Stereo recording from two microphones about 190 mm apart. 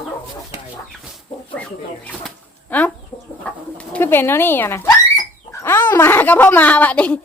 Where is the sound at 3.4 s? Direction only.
5° left (ahead or behind).